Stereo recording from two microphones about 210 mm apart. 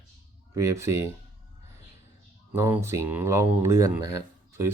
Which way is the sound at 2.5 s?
10° right (ahead or behind).